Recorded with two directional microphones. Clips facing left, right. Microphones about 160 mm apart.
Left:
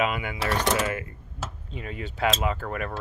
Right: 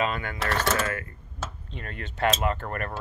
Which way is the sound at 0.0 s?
10° left (ahead or behind).